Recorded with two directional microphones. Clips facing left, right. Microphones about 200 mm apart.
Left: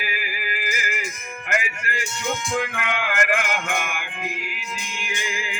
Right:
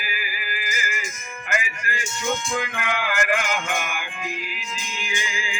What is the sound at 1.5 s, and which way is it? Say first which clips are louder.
Speech: left 1 dB; 65° left (ahead or behind).